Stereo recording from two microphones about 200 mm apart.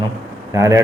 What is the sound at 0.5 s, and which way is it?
Speech, 15° right (ahead or behind).